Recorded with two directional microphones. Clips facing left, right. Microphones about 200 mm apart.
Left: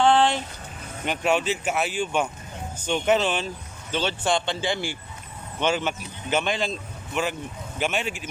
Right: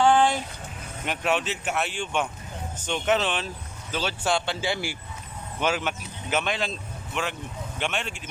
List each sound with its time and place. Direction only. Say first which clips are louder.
0.0 s vehicle: left 1 dB; 10° right (ahead or behind)
1.0 s speech: left 3 dB; centre (ahead or behind)